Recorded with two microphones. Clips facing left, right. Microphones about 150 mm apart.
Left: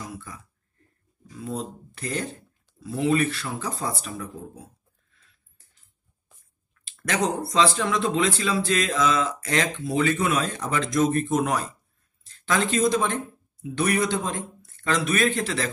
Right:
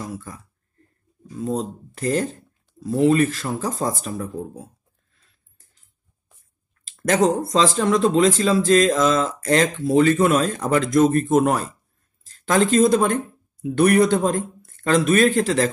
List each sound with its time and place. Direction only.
0.0 s speech: 45° right (ahead or behind)
5.1 s a sound: 40° right (ahead or behind)
6.7 s speech: 40° right (ahead or behind)